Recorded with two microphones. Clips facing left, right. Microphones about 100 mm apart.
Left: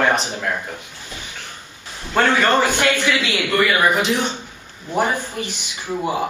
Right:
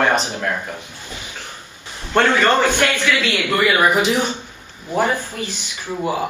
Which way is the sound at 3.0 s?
20° left (ahead or behind).